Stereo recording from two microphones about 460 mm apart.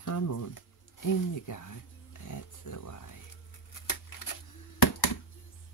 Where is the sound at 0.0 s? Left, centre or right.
Left.